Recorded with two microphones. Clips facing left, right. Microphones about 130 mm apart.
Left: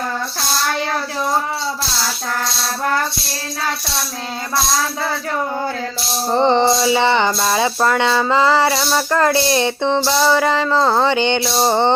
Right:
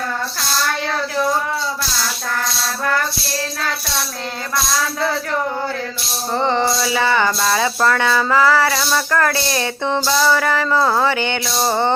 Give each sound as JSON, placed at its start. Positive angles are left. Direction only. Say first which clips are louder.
{"t": 6.3, "sound": "speech", "louder": "left 4 dB", "side_deg": 30}